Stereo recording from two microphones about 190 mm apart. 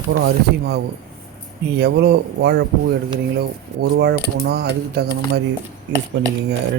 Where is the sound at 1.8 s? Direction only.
60° right (ahead or behind).